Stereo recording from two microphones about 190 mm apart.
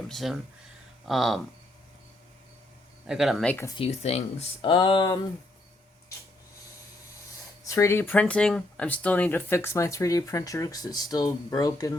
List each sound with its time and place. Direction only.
0.1 s speech: centre (ahead or behind)
3.1 s speech: centre (ahead or behind)
3.8 s speech: 35° left (ahead or behind)
7.6 s speech: 15° left (ahead or behind)